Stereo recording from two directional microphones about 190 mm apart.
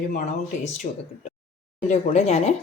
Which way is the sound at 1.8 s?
35° left (ahead or behind).